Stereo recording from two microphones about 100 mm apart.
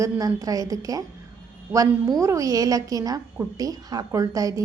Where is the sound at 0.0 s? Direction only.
35° right (ahead or behind).